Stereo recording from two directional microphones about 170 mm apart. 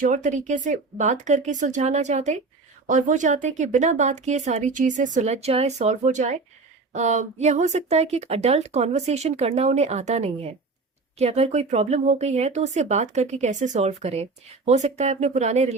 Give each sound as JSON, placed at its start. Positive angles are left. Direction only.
{"t": 0.0, "sound": "speech", "side_deg": -45}